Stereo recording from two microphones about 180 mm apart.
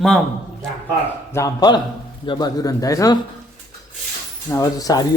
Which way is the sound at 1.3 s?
15° left (ahead or behind).